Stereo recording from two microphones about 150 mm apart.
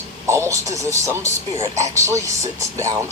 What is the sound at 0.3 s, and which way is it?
Speech, 20° right (ahead or behind).